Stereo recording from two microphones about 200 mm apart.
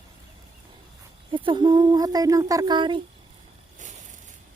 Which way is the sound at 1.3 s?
25° right (ahead or behind).